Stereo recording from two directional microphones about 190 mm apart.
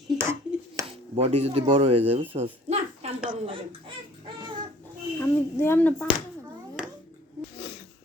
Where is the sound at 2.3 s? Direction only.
35° right (ahead or behind).